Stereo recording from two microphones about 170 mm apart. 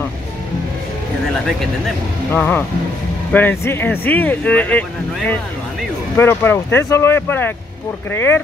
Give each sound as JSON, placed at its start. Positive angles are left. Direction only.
{"t": 2.3, "sound": "speech", "side_deg": 10}